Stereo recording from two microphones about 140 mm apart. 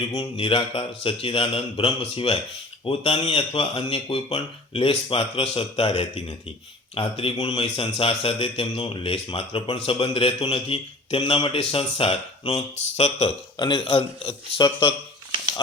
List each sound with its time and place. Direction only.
0.3 s speech: 40° left (ahead or behind)
12.7 s speech: 55° left (ahead or behind)
13.6 s speech: 35° left (ahead or behind)
14.6 s speech: 35° left (ahead or behind)